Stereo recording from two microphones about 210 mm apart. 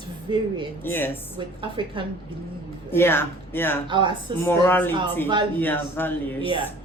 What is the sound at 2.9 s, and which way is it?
Speech, 10° left (ahead or behind).